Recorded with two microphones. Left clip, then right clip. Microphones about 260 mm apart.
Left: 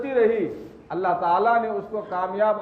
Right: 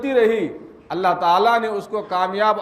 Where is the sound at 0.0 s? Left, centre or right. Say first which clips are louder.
Right 3 dB; right.